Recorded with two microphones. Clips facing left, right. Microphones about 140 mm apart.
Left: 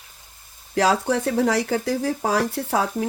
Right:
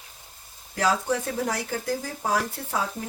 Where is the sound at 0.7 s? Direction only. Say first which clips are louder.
Left 5 dB; 80° left.